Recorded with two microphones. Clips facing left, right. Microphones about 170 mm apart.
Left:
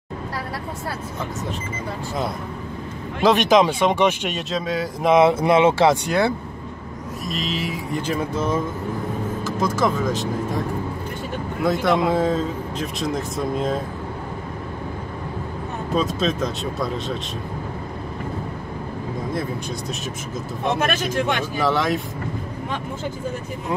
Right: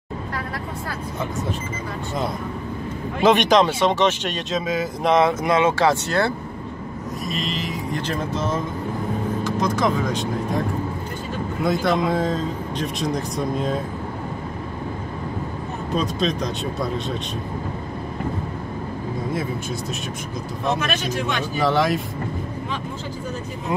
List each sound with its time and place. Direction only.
3.2 s speech: centre (ahead or behind)
4.6 s speech: 5° right (ahead or behind)
5.2 s speech: 25° left (ahead or behind)
6.0 s speech: 10° left (ahead or behind)
7.2 s speech: centre (ahead or behind)
11.6 s speech: centre (ahead or behind)
15.9 s speech: centre (ahead or behind)
20.8 s speech: 55° left (ahead or behind)
21.5 s speech: centre (ahead or behind)